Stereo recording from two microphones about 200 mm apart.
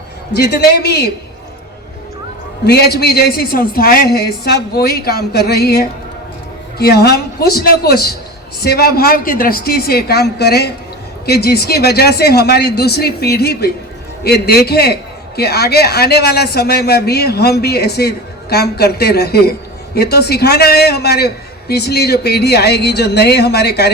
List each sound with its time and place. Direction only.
0.3 s a man's voice: 55° left (ahead or behind)
2.6 s a woman's voice: 50° left (ahead or behind)